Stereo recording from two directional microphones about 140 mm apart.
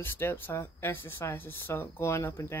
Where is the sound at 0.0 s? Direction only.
15° left (ahead or behind).